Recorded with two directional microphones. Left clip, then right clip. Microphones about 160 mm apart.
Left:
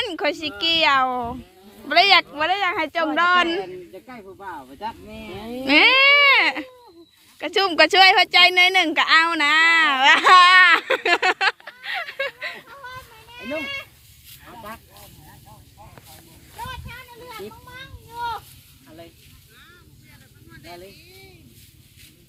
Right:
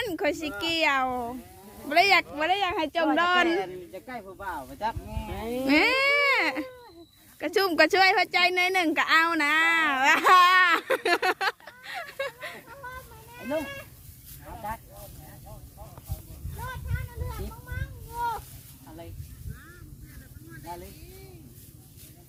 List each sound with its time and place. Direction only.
0.0 s speech: 15° right (ahead or behind)
5.5 s speech: 10° right (ahead or behind)
13.4 s speech: 50° right (ahead or behind)
17.7 s a sound: 50° right (ahead or behind)